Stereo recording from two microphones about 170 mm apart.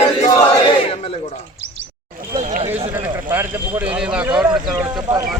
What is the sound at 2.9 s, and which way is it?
Speech, 10° right (ahead or behind).